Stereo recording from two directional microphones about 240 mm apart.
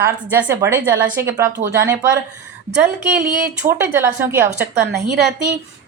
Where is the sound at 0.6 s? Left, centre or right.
Centre.